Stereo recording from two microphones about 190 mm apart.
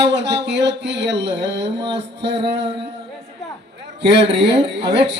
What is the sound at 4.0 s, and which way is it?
Music, 65° right (ahead or behind).